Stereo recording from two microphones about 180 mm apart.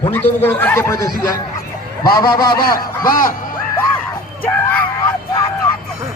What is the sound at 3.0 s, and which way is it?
Speech, 50° left (ahead or behind).